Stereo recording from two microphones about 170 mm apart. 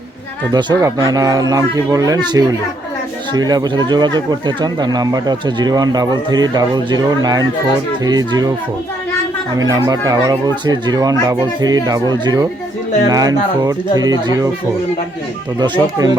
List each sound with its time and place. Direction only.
0.5 s speech: 25° right (ahead or behind)
9.6 s speech: 20° right (ahead or behind)
15.5 s speech: 25° right (ahead or behind)